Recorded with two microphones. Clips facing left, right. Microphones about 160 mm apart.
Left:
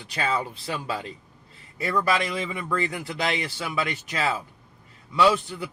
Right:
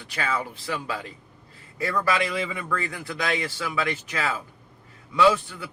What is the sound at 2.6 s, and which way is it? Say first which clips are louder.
Speech: left 2 dB; 20° left (ahead or behind).